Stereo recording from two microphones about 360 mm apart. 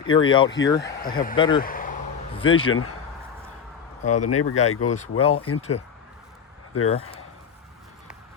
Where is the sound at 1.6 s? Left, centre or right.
Left.